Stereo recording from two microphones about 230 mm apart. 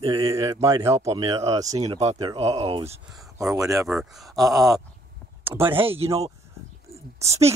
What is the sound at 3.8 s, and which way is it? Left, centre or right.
Speech, centre.